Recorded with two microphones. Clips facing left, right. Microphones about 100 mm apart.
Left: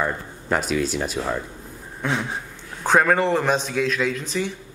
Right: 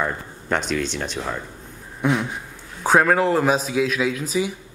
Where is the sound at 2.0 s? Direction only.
10° right (ahead or behind).